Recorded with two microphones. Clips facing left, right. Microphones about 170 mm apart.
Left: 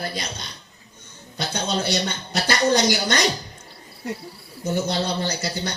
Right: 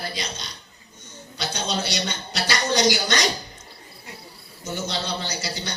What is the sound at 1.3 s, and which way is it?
A woman's voice, 55° left (ahead or behind).